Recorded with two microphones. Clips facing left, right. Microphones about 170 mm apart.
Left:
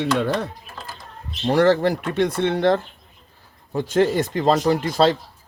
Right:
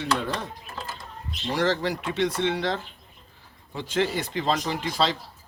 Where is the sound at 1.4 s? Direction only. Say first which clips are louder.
Left 8 dB; 55° left (ahead or behind).